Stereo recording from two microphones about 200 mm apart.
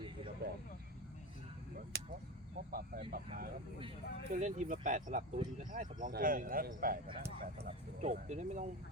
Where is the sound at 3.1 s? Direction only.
45° right (ahead or behind).